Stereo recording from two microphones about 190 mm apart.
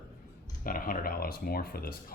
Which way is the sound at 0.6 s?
50° left (ahead or behind).